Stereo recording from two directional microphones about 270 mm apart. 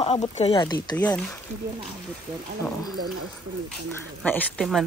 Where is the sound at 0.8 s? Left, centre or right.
Centre.